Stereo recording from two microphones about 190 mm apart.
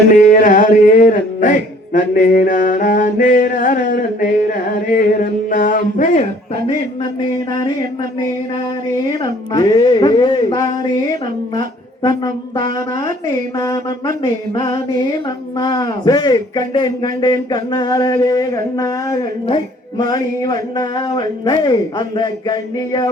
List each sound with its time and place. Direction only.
0.1 s music: 45° left (ahead or behind)
4.9 s a sound: 45° left (ahead or behind)
9.0 s speech: 20° left (ahead or behind)
12.0 s speech: 25° left (ahead or behind)
13.6 s mantra: 20° left (ahead or behind)
14.2 s speech: 25° left (ahead or behind)